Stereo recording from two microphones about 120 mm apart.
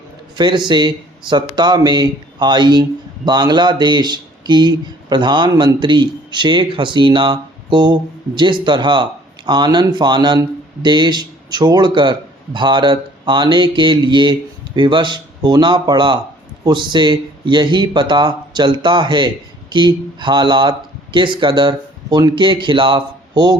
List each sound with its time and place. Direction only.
0.3 s speech: 40° right (ahead or behind)